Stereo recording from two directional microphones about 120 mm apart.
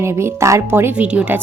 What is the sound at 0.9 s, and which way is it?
Speech, 10° right (ahead or behind).